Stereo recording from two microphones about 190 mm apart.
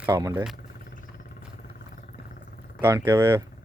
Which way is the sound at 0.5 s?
50° left (ahead or behind).